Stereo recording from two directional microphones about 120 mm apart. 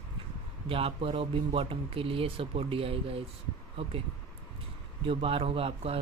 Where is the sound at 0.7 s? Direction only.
50° right (ahead or behind).